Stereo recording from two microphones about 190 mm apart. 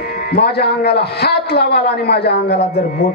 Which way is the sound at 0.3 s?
60° left (ahead or behind).